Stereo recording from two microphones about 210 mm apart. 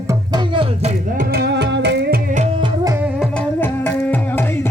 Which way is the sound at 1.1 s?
50° right (ahead or behind).